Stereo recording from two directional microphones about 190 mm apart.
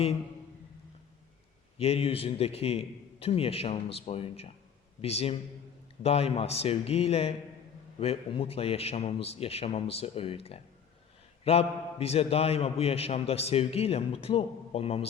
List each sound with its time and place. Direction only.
1.8 s a man's voice: 30° left (ahead or behind)